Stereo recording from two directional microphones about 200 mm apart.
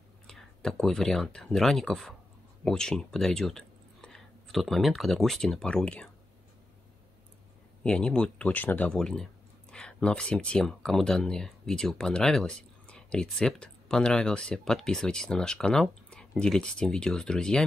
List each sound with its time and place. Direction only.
0.3 s speech: 5° left (ahead or behind)
7.8 s speech: 5° left (ahead or behind)